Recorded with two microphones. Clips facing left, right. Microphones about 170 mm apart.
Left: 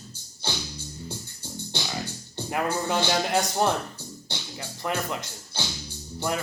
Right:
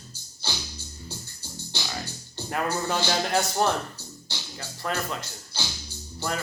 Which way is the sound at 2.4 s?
15° left (ahead or behind).